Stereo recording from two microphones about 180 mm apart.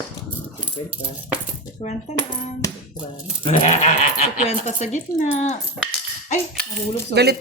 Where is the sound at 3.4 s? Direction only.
40° left (ahead or behind).